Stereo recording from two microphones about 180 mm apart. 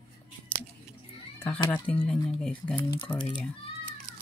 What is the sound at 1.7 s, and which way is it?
Speech, 5° left (ahead or behind).